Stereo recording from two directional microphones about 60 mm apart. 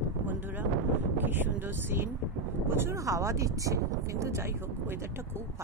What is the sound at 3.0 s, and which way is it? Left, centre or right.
Speech, right.